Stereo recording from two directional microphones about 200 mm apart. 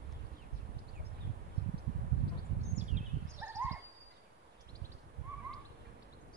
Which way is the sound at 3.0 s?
40° right (ahead or behind).